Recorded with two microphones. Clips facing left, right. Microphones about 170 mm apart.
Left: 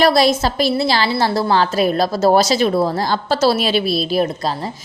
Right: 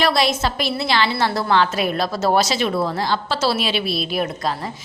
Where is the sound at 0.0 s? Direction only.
40° left (ahead or behind).